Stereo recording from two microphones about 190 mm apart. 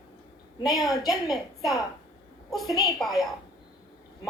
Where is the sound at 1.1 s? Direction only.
Centre (ahead or behind).